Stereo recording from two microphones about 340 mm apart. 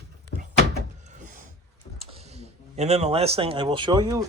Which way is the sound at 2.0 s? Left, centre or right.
Centre.